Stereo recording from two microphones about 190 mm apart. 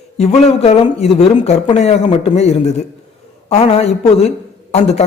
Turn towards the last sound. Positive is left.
turn(degrees=35)  # may be behind; listen again after turning